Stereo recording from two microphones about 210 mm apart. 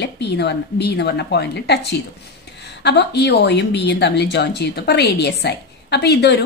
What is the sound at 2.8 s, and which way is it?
A woman's voice, 55° left (ahead or behind).